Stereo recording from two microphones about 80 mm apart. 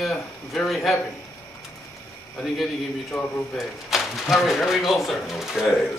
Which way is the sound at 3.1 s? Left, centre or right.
Left.